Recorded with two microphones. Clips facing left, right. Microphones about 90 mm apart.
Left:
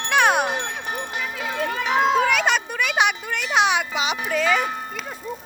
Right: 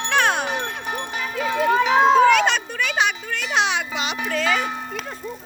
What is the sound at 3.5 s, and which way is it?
Music, 5° left (ahead or behind).